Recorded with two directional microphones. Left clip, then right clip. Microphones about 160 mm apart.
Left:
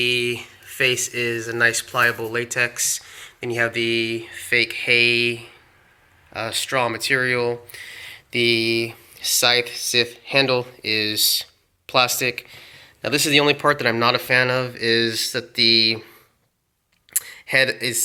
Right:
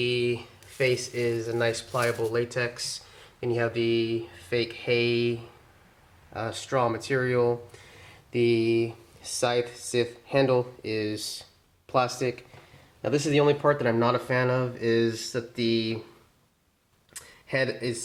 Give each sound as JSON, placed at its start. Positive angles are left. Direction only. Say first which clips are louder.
{"t": 0.0, "sound": "speech", "louder": "left 6 dB", "side_deg": 15}
{"t": 13.4, "sound": "speech", "louder": "left 5 dB", "side_deg": 20}
{"t": 17.1, "sound": "a sound", "louder": "left 9 dB", "side_deg": 20}